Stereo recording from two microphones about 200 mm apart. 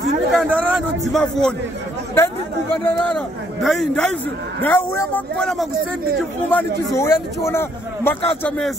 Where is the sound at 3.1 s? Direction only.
Centre (ahead or behind).